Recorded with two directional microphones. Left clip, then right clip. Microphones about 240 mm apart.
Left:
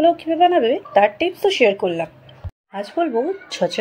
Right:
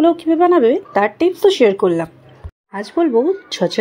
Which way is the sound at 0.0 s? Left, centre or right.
Right.